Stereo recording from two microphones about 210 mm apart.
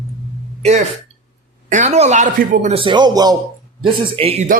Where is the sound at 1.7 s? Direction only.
35° right (ahead or behind).